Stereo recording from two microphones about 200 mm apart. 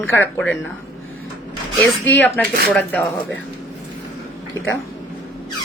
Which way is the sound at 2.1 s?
10° left (ahead or behind).